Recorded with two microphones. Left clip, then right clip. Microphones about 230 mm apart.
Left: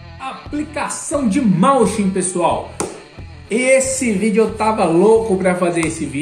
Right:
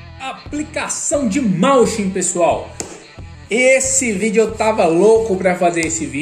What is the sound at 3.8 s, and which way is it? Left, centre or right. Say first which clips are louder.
A woman's voice: left 1 dB; centre.